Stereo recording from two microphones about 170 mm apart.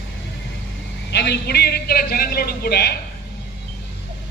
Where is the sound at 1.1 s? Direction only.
75° left (ahead or behind).